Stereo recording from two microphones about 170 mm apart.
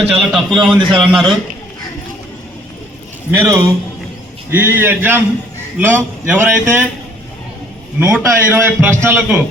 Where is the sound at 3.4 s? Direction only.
15° right (ahead or behind).